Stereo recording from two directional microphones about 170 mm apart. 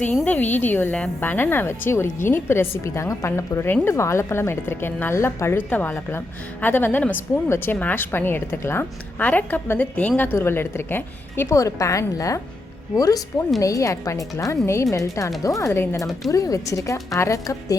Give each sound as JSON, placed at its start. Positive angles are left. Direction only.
{"t": 0.3, "sound": "a woman's voice", "side_deg": 10}